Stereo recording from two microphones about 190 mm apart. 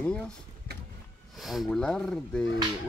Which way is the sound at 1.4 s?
Centre (ahead or behind).